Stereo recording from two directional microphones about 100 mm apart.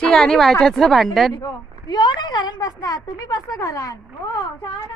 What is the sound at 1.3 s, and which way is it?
A woman's voice, 45° left (ahead or behind).